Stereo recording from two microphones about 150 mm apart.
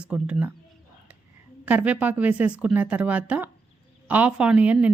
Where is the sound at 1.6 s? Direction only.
10° right (ahead or behind).